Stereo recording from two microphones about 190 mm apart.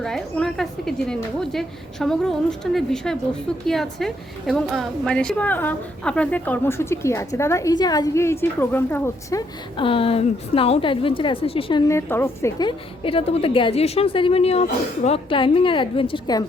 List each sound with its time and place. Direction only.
0.0 s a woman's voice: 5° left (ahead or behind)
9.7 s a woman's voice: 30° left (ahead or behind)
11.9 s a woman's voice: 10° left (ahead or behind)